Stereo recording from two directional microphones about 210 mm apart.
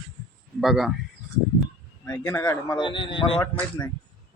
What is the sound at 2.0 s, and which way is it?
Speech, 10° left (ahead or behind).